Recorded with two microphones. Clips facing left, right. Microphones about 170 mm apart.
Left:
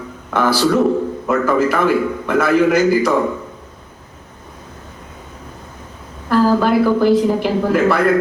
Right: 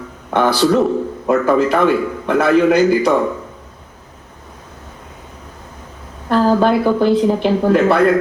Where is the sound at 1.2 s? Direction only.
25° right (ahead or behind).